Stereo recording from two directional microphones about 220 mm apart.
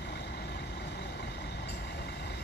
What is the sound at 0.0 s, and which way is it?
Vehicle, 50° left (ahead or behind).